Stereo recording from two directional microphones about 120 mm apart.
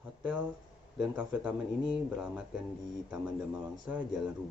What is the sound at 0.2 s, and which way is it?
Speech, 10° right (ahead or behind).